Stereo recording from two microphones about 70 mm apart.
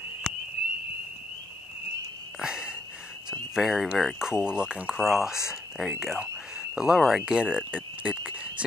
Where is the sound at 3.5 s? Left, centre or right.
Centre.